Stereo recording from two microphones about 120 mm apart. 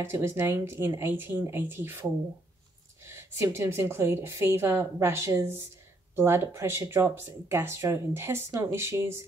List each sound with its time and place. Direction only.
0.0 s speech: 20° right (ahead or behind)
3.1 s speech: 20° right (ahead or behind)